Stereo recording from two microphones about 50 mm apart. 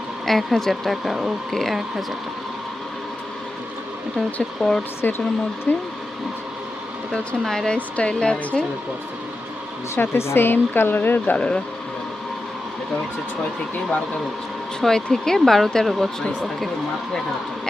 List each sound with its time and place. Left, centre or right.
0.3 s speech: centre
1.5 s speech: centre
4.6 s speech: centre
5.0 s speech: left
7.1 s speech: centre
7.8 s speech: left
8.2 s speech: centre
9.9 s speech: left
11.3 s speech: left
14.8 s speech: centre